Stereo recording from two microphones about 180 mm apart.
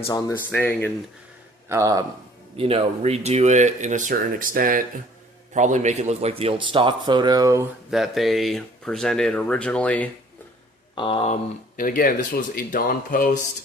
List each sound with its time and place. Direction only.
0.1 s speech: 15° left (ahead or behind)
1.7 s a man's voice: 20° right (ahead or behind)
2.6 s a man's voice: 35° right (ahead or behind); by 7.7 s 15° right (ahead or behind)
7.9 s speech: centre (ahead or behind)
10.9 s speech: 30° left (ahead or behind)
11.8 s a man's voice: 50° left (ahead or behind)